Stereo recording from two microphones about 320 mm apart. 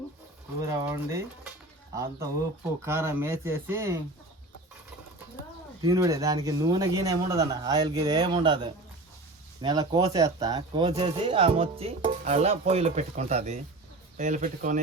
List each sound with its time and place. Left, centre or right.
0.6 s speech: centre
5.8 s speech: centre